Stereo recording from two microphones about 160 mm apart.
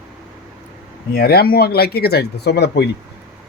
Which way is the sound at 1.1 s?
70° left (ahead or behind).